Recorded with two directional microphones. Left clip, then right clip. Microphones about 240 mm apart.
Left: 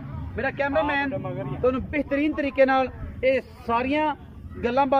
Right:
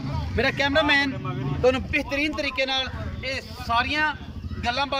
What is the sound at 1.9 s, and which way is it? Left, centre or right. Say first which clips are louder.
A man's voice: even; left.